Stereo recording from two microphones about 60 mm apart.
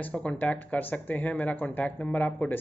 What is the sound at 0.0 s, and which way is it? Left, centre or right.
Speech, left.